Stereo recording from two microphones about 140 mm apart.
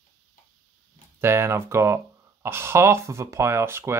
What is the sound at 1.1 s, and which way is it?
Speech, 20° right (ahead or behind).